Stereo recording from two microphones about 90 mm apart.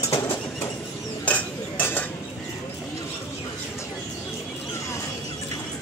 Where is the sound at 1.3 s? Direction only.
20° left (ahead or behind).